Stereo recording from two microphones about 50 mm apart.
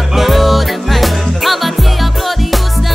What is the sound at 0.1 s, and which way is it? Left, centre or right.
Music, centre.